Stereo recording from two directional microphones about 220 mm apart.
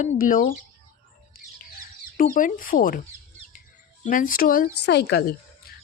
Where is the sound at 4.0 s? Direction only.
35° left (ahead or behind).